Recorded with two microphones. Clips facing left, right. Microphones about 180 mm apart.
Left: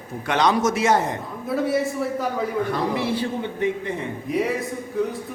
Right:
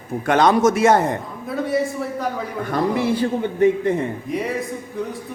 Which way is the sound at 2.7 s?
45° right (ahead or behind).